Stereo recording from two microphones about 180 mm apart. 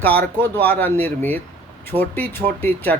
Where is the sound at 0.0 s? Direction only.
10° left (ahead or behind).